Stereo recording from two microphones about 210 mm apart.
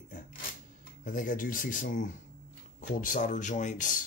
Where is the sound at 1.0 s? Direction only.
40° left (ahead or behind).